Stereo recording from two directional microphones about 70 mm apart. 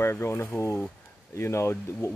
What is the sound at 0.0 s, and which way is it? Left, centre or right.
Speech, left.